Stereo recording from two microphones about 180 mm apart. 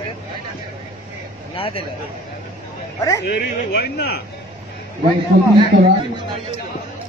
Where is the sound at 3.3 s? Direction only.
65° left (ahead or behind).